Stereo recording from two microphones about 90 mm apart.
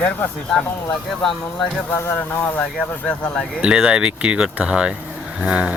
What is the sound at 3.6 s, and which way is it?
Speech, 10° right (ahead or behind).